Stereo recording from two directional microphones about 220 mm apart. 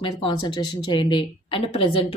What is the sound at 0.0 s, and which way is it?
Speech, 20° left (ahead or behind).